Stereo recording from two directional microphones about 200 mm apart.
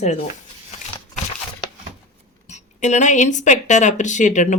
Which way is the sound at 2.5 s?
35° left (ahead or behind).